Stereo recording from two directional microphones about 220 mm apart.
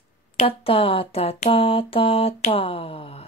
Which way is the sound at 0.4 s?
25° left (ahead or behind).